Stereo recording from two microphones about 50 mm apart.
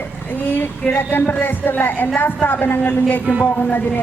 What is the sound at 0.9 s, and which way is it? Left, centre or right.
A woman's voice, left.